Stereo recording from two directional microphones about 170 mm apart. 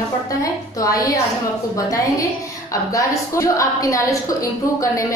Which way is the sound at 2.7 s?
20° left (ahead or behind).